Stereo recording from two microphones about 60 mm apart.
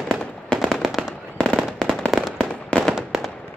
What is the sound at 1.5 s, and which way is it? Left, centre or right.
Firecracker, centre.